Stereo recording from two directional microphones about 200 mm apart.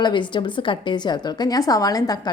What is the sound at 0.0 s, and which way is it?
A woman's voice, 25° left (ahead or behind).